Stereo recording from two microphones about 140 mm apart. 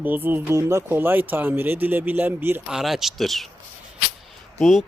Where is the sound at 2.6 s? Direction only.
Centre (ahead or behind).